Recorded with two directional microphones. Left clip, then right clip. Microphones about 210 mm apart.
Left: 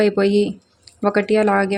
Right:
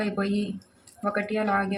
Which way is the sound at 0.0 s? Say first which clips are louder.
Left 13 dB; 50° left (ahead or behind).